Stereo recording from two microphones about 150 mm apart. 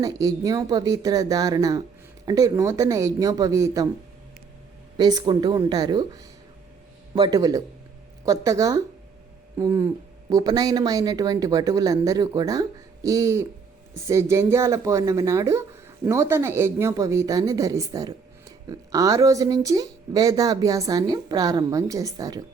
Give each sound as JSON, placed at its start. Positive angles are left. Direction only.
{"t": 0.0, "sound": "speech", "side_deg": -25}
{"t": 4.9, "sound": "speech", "side_deg": -30}